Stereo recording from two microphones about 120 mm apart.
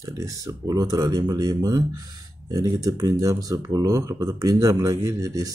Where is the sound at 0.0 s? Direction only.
30° right (ahead or behind).